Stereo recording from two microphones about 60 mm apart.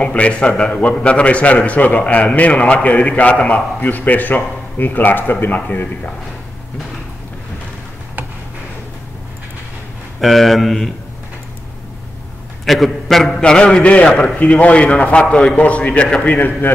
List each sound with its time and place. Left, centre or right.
0.0 s a man's voice: left
10.2 s a man's voice: centre
12.6 s a man's voice: centre
13.4 s a man's voice: centre